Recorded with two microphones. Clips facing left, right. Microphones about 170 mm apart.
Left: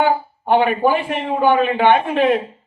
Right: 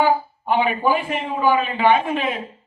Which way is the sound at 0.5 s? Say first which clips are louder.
Left 4 dB; 60° left (ahead or behind).